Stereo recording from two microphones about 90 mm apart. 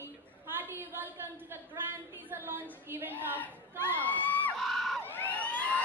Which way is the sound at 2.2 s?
25° right (ahead or behind).